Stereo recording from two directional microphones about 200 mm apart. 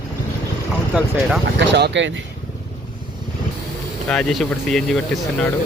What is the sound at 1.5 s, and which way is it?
Speech, 60° right (ahead or behind).